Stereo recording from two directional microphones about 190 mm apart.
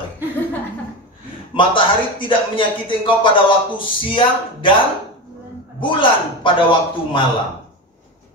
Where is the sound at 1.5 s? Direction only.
25° left (ahead or behind).